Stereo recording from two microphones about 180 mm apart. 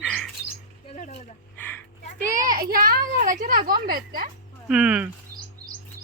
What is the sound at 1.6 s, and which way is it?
Speech, 10° left (ahead or behind).